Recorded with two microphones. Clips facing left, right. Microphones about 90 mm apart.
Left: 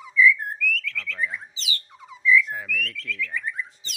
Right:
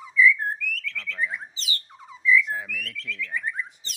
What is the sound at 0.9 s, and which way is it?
Bird, 30° right (ahead or behind).